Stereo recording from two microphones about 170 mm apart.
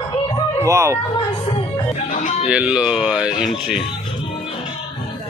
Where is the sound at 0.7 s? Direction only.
15° right (ahead or behind).